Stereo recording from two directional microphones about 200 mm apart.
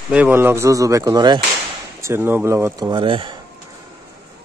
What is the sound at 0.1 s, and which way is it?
A man's voice, 10° right (ahead or behind).